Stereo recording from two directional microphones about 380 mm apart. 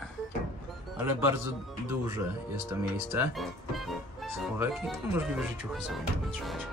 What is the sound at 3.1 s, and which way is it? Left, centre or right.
Speech, centre.